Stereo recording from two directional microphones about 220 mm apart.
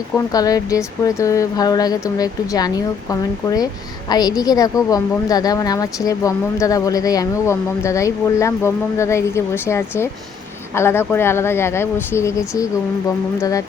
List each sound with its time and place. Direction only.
0.3 s a woman's voice: 15° left (ahead or behind)